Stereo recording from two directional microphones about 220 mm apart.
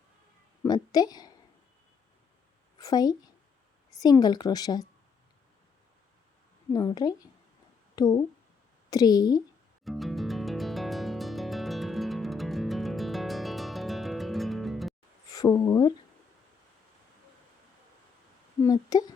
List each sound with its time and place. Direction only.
0.6 s a woman's voice: 15° left (ahead or behind)
2.7 s a woman's voice: 20° left (ahead or behind)
6.7 s a woman's voice: 20° left (ahead or behind)
9.8 s music: centre (ahead or behind)
15.3 s speech: 15° left (ahead or behind)
18.6 s a woman's voice: 15° left (ahead or behind)